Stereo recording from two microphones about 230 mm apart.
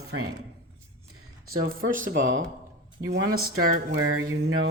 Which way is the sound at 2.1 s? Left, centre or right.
Right.